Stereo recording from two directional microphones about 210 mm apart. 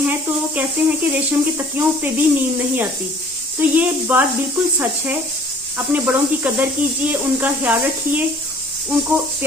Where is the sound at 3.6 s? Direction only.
10° right (ahead or behind).